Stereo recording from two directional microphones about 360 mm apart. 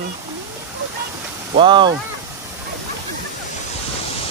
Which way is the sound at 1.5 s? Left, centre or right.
Centre.